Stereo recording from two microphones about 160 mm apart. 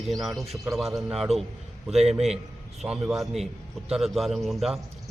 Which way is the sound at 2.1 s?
40° right (ahead or behind).